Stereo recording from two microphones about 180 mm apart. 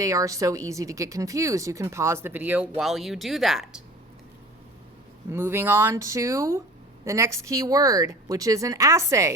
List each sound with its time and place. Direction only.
0.0 s speech: 20° right (ahead or behind); by 3.8 s centre (ahead or behind)
5.3 s speech: 15° right (ahead or behind)